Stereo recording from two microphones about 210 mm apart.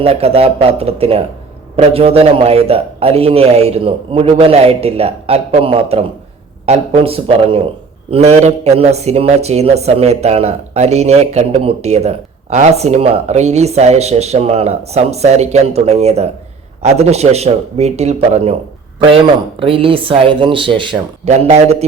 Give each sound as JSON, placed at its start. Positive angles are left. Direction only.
{"t": 0.0, "sound": "a man's voice", "side_deg": -30}